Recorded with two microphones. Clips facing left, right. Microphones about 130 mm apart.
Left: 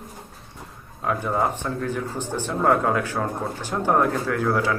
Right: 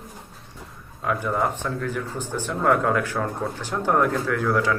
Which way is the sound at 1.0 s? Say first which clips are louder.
Left 1 dB; 20° left (ahead or behind).